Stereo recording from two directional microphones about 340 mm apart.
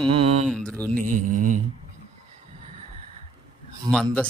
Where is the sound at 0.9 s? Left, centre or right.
Right.